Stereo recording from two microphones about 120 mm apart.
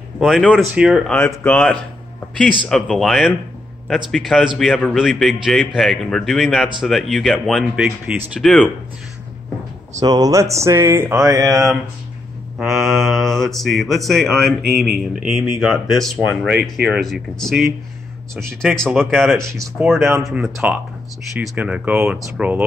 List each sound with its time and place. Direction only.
0.2 s speech: 5° left (ahead or behind)
1.1 s speech: 15° left (ahead or behind)
9.9 s speech: 30° right (ahead or behind)
12.5 s speech: centre (ahead or behind)
18.9 s speech: centre (ahead or behind)
20.0 s speech: 20° right (ahead or behind)
20.3 s speech: 10° right (ahead or behind)